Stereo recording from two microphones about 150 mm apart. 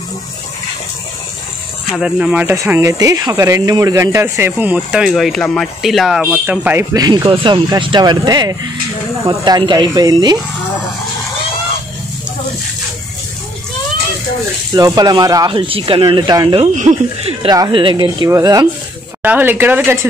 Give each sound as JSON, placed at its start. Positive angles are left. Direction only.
{"t": 2.0, "sound": "speech", "side_deg": -5}
{"t": 2.4, "sound": "speech", "side_deg": -20}
{"t": 14.7, "sound": "speech", "side_deg": -25}
{"t": 16.7, "sound": "speech", "side_deg": -55}
{"t": 17.5, "sound": "speech", "side_deg": -30}
{"t": 19.2, "sound": "speech", "side_deg": -10}